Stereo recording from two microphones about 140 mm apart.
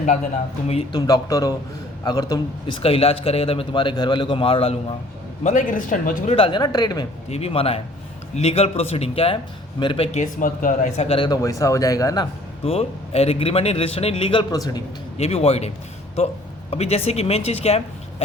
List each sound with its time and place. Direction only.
0.9 s a man's voice: 25° left (ahead or behind)
2.8 s a man's voice: 45° left (ahead or behind)
5.4 s speech: 60° left (ahead or behind)
6.2 s a man's voice: 40° left (ahead or behind)
7.3 s a man's voice: 45° left (ahead or behind)
10.1 s speech: 60° left (ahead or behind)
11.2 s a man's voice: 25° left (ahead or behind)
12.6 s a man's voice: 45° left (ahead or behind)
14.5 s a man's voice: 25° left (ahead or behind)
15.2 s a man's voice: 45° left (ahead or behind)